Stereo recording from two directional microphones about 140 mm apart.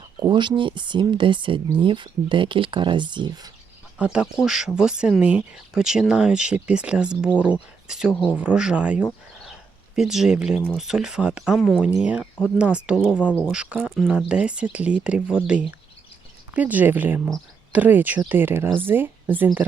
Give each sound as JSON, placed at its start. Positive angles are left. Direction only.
{"t": 0.2, "sound": "speech", "side_deg": -35}
{"t": 3.9, "sound": "speech", "side_deg": -10}
{"t": 9.4, "sound": "a sound", "side_deg": -5}
{"t": 10.6, "sound": "speech", "side_deg": 0}